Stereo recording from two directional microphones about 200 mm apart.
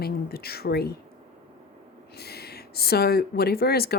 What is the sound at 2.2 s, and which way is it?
Speech, 50° left (ahead or behind).